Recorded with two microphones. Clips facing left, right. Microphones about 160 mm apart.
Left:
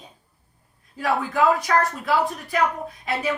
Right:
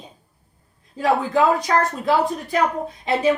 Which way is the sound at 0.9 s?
25° right (ahead or behind).